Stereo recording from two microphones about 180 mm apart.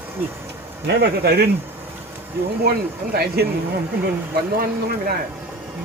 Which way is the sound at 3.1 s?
60° right (ahead or behind).